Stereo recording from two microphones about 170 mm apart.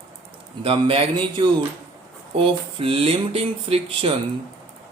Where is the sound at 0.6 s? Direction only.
35° right (ahead or behind).